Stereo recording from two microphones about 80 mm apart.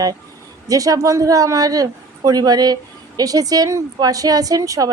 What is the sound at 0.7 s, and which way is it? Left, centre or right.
A woman's voice, right.